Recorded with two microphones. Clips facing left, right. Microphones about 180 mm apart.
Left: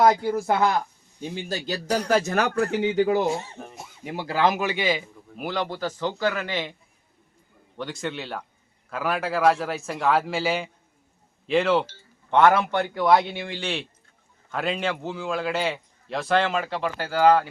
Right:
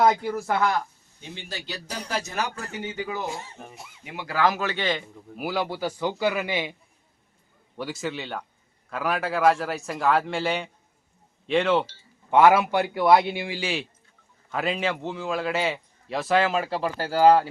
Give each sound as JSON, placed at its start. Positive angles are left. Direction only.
{"t": 0.3, "sound": "a man's voice", "side_deg": 25}
{"t": 1.5, "sound": "a man's voice", "side_deg": 45}
{"t": 1.9, "sound": "speech", "side_deg": 60}
{"t": 4.0, "sound": "a man's voice", "side_deg": 35}
{"t": 5.4, "sound": "a man's voice", "side_deg": -5}
{"t": 7.8, "sound": "a man's voice", "side_deg": -5}
{"t": 16.6, "sound": "speech", "side_deg": -35}